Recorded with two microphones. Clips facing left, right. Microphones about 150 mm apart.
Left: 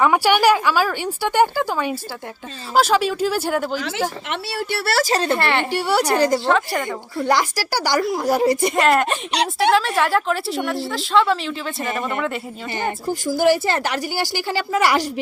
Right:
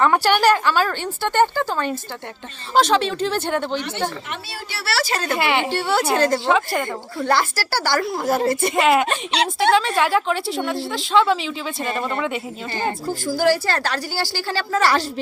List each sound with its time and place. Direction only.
0.0 s a woman's voice: 10° left (ahead or behind)
3.8 s speech: 90° left
4.3 s speech: 70° left (ahead or behind)
4.9 s speech: 45° left (ahead or behind)
5.4 s speech: centre (ahead or behind)
5.7 s a woman's voice: 10° left (ahead or behind)
6.3 s speech: centre (ahead or behind)
7.3 s a woman's voice: 15° left (ahead or behind)
8.7 s speech: centre (ahead or behind)
13.2 s a woman's voice: 20° left (ahead or behind)